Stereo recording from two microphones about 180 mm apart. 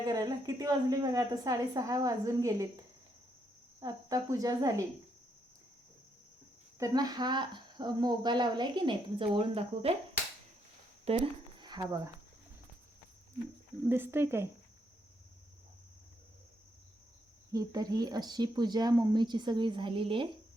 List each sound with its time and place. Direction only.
0.0 s speech: 20° right (ahead or behind)
3.8 s speech: 20° right (ahead or behind)
6.7 s speech: 20° right (ahead or behind)
11.1 s speech: 35° right (ahead or behind)
11.6 s speech: 20° right (ahead or behind)
13.8 s speech: 10° right (ahead or behind)
17.5 s speech: 20° right (ahead or behind)